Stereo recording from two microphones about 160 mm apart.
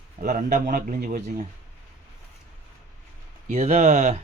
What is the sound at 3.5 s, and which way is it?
Speech, 45° right (ahead or behind).